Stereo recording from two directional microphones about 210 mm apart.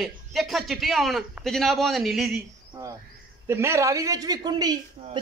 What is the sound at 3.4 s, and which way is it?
A man's voice, 15° right (ahead or behind).